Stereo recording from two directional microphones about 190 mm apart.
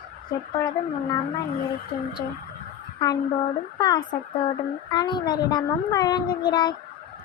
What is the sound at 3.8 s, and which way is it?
Speech, 20° left (ahead or behind).